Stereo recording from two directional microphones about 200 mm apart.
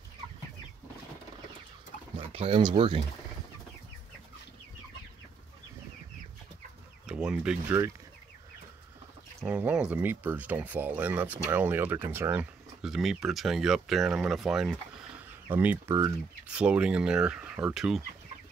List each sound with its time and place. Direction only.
2.1 s speech: 30° right (ahead or behind)
7.1 s speech: 5° right (ahead or behind)
9.4 s speech: 5° right (ahead or behind)